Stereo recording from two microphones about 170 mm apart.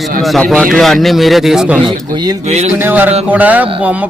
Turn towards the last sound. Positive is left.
turn(degrees=-10)  # may be behind; listen again after turning